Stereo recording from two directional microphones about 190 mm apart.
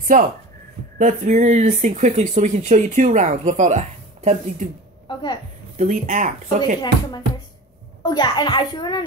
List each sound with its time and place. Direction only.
0.9 s speech: 40° right (ahead or behind)
5.0 s a woman's voice: 25° left (ahead or behind)
5.8 s speech: 40° right (ahead or behind)
8.0 s a child's voice: 20° left (ahead or behind)